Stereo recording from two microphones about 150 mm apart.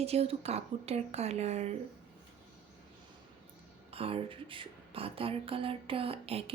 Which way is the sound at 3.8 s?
40° right (ahead or behind).